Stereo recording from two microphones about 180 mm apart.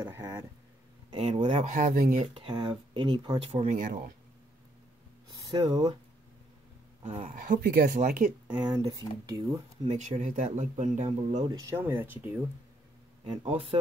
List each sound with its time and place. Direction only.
0.0 s speech: 15° right (ahead or behind)
1.1 s speech: 35° right (ahead or behind)
2.3 s speech: 25° right (ahead or behind)
3.7 s speech: 45° right (ahead or behind)
5.3 s speech: 20° right (ahead or behind)
7.0 s speech: 30° right (ahead or behind)
7.3 s speech: 50° right (ahead or behind)
8.5 s speech: 25° right (ahead or behind)
9.8 s speech: 40° right (ahead or behind)
11.4 s speech: 20° right (ahead or behind)
13.2 s speech: 30° right (ahead or behind)